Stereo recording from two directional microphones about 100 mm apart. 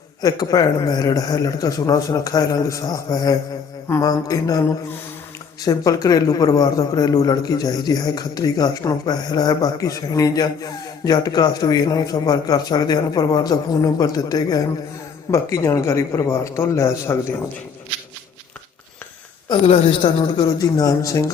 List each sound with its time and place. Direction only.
0.2 s a man's voice: 40° left (ahead or behind)
19.6 s a woman's voice: 65° left (ahead or behind)
20.4 s a man's voice: 40° left (ahead or behind)